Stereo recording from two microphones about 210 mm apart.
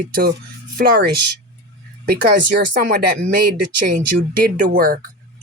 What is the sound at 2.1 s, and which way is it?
Speech, 50° right (ahead or behind).